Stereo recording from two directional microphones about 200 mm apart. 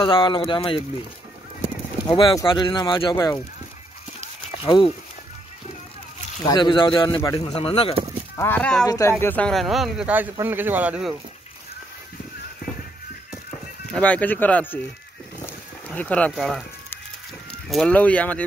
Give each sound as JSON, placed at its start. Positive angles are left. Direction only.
{"t": 0.0, "sound": "speech", "side_deg": 25}
{"t": 2.0, "sound": "speech", "side_deg": 25}
{"t": 4.2, "sound": "a sound", "side_deg": 25}
{"t": 6.4, "sound": "speech", "side_deg": 20}
{"t": 8.4, "sound": "speech", "side_deg": 10}
{"t": 8.8, "sound": "speech", "side_deg": 15}
{"t": 13.9, "sound": "speech", "side_deg": 5}
{"t": 15.4, "sound": "livestock", "side_deg": 5}
{"t": 17.6, "sound": "speech", "side_deg": 5}